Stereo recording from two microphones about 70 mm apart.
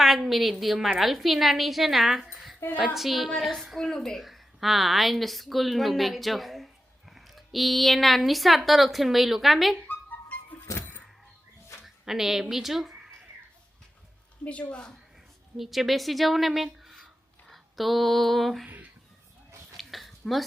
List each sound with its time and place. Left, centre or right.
0.0 s a woman's voice: centre
9.9 s music: left
11.8 s speech: centre
14.4 s a woman's voice: centre
15.5 s a woman's voice: centre
17.5 s a sound: centre
19.7 s a sound: centre